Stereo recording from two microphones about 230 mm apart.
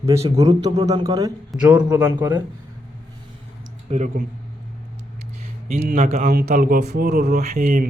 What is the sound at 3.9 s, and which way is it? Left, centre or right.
Speech, right.